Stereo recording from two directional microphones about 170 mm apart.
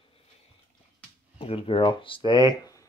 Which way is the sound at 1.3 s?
35° left (ahead or behind).